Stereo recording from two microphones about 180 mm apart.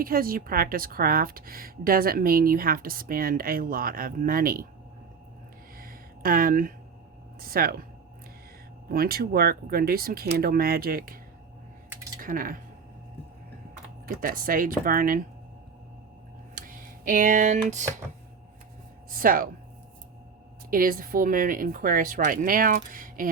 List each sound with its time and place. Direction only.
0.0 s a woman's voice: 55° right (ahead or behind)
5.7 s a sound: 55° right (ahead or behind)
7.3 s speech: 55° right (ahead or behind)
8.9 s speech: 55° right (ahead or behind)
12.2 s a woman's voice: 50° right (ahead or behind)
14.2 s a woman's voice: 50° right (ahead or behind)
16.6 s speech: 50° right (ahead or behind)
19.1 s a woman's voice: 50° right (ahead or behind)
20.7 s a woman's voice: 50° right (ahead or behind)